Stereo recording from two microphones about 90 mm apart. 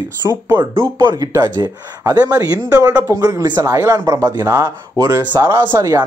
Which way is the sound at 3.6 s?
30° right (ahead or behind).